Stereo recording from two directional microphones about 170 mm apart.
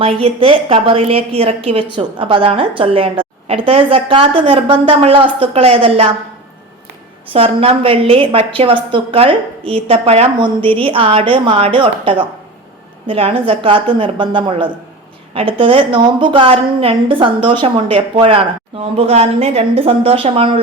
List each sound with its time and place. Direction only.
0.0 s a woman's voice: 35° right (ahead or behind)
7.3 s a woman's voice: 35° right (ahead or behind)